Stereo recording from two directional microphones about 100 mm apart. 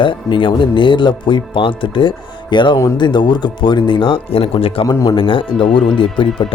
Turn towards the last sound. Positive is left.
turn(degrees=60)  # may be behind; listen again after turning